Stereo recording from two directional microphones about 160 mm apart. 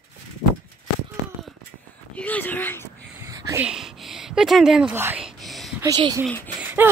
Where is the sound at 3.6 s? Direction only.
5° right (ahead or behind).